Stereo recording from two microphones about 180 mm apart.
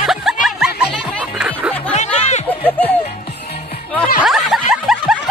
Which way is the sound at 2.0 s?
40° left (ahead or behind).